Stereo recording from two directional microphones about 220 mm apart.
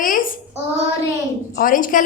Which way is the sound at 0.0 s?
40° left (ahead or behind).